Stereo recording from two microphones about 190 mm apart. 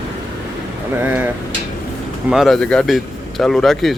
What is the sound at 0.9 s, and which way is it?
Speech, 10° right (ahead or behind).